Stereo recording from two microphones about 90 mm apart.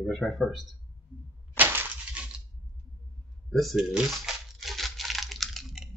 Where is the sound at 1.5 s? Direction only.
20° right (ahead or behind).